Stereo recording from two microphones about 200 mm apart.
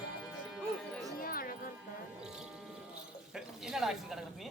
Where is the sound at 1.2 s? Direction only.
45° left (ahead or behind).